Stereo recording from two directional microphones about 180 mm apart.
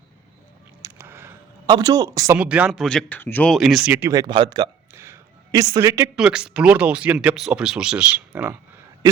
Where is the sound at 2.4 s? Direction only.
5° right (ahead or behind); by 4.7 s 25° right (ahead or behind).